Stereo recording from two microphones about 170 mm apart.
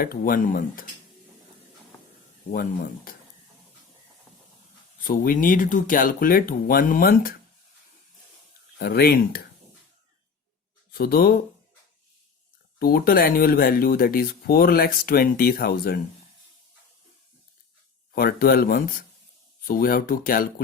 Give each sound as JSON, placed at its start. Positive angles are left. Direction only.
{"t": 0.0, "sound": "speech", "side_deg": 60}
{"t": 2.5, "sound": "speech", "side_deg": 55}
{"t": 5.0, "sound": "speech", "side_deg": 55}
{"t": 8.8, "sound": "speech", "side_deg": 65}
{"t": 10.9, "sound": "speech", "side_deg": 60}
{"t": 12.8, "sound": "speech", "side_deg": 60}
{"t": 18.1, "sound": "speech", "side_deg": 60}